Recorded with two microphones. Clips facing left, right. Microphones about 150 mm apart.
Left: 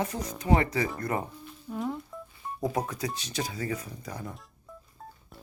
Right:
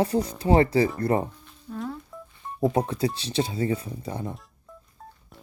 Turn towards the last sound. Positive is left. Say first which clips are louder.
# right 6 dB
turn(degrees=-25)  # may be behind; listen again after turning